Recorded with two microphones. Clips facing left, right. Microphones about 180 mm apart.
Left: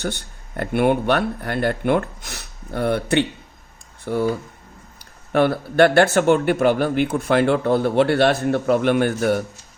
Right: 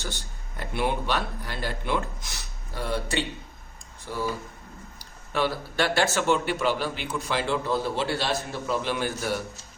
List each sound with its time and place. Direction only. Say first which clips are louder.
0.0 s speech: left 9 dB; 60° left (ahead or behind)